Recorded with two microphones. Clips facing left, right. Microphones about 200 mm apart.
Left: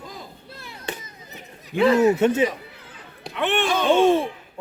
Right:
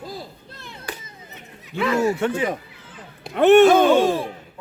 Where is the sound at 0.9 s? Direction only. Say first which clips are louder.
Left 2 dB; 25° left (ahead or behind).